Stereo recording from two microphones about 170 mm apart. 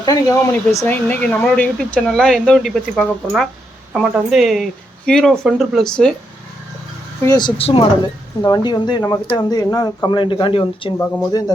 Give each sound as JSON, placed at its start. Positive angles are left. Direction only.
{"t": 0.0, "sound": "speech", "side_deg": 20}
{"t": 7.3, "sound": "speech", "side_deg": 25}
{"t": 10.9, "sound": "speech", "side_deg": 10}
{"t": 11.3, "sound": "speech", "side_deg": 20}